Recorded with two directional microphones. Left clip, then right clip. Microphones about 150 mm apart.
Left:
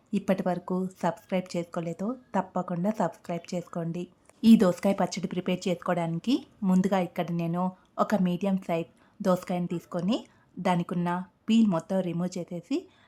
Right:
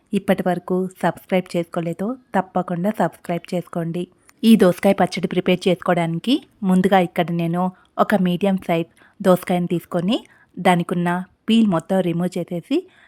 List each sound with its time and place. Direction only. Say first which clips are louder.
0.1 s a woman's voice: right 8 dB; 30° right (ahead or behind)